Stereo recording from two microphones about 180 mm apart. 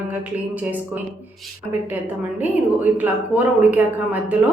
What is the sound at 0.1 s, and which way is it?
A woman's voice, 10° right (ahead or behind).